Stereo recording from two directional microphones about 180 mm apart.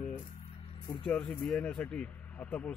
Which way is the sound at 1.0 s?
10° left (ahead or behind).